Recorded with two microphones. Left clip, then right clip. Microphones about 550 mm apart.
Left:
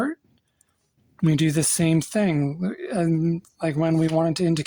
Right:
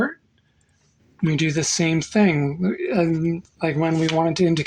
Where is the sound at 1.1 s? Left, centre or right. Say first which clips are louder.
Even; left.